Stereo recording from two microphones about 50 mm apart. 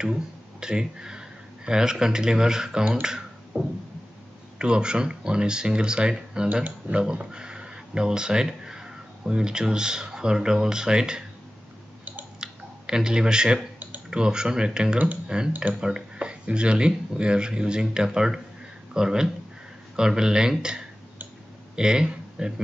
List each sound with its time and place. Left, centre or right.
0.0 s speech: centre
2.9 s beatboxing: centre
4.6 s speech: centre
12.4 s clicking: centre
14.1 s speech: centre